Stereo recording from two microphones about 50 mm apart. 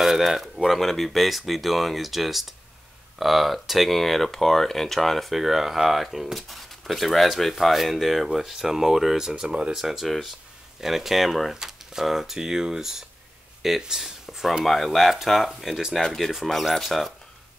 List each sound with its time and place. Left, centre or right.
0.0 s speech: centre
9.4 s speech: centre
9.8 s speech: centre
11.5 s speech: centre
14.6 s speech: centre